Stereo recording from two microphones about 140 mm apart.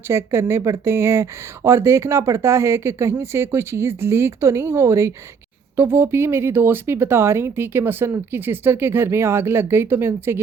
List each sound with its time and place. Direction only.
0.1 s speech: 20° right (ahead or behind)